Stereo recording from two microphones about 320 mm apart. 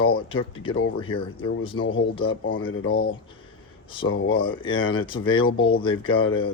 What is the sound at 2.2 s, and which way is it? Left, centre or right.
Speech, centre.